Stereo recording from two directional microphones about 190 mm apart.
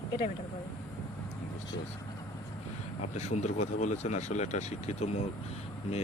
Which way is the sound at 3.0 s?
35° left (ahead or behind).